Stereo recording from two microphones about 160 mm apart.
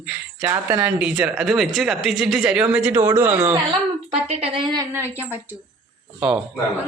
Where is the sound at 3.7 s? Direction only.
35° right (ahead or behind).